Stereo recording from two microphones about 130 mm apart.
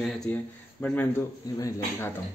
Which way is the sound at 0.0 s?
5° left (ahead or behind).